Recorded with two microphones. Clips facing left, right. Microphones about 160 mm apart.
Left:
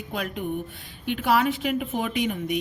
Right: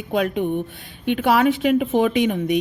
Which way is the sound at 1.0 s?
65° right (ahead or behind).